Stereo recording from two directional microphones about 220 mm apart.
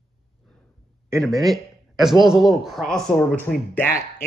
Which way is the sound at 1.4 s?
Centre (ahead or behind).